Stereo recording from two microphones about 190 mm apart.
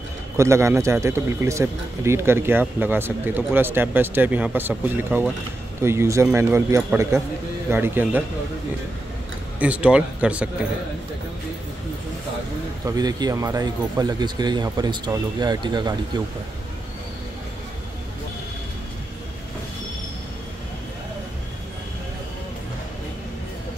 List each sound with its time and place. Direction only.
0.4 s speech: 15° right (ahead or behind)
9.6 s speech: 5° right (ahead or behind)
12.8 s speech: 20° right (ahead or behind)